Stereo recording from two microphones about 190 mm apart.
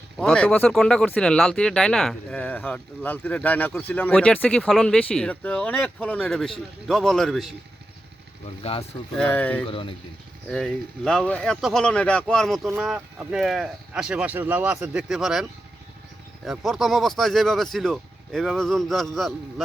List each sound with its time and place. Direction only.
0.2 s speech: 5° left (ahead or behind)
9.1 s speech: 5° left (ahead or behind)
9.6 s speech: 30° left (ahead or behind)
10.5 s speech: 5° left (ahead or behind)
16.5 s speech: centre (ahead or behind)